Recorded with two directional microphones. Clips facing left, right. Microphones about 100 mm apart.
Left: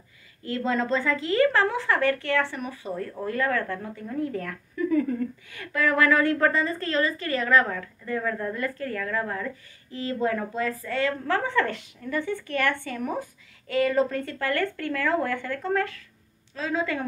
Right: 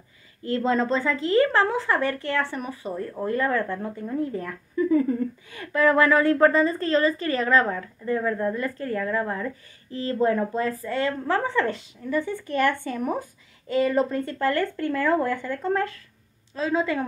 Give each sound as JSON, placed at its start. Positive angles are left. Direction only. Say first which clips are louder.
{"t": 0.4, "sound": "a woman's voice", "louder": "right 3 dB", "side_deg": -30}